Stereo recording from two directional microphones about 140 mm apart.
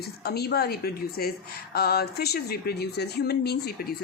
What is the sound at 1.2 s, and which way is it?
A woman's voice, 90° left.